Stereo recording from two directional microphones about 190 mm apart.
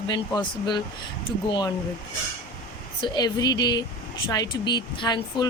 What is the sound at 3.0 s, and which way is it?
A woman's voice, 20° left (ahead or behind).